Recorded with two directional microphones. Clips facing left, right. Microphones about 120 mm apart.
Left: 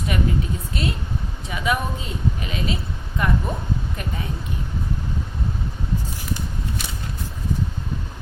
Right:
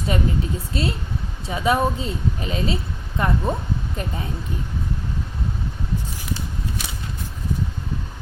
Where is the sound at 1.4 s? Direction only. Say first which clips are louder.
Right 4 dB; 30° right (ahead or behind).